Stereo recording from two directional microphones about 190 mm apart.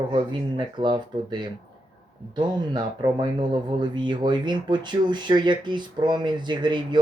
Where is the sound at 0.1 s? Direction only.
25° right (ahead or behind).